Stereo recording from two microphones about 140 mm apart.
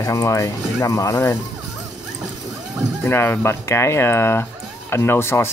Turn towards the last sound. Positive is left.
turn(degrees=15)  # may be behind; listen again after turning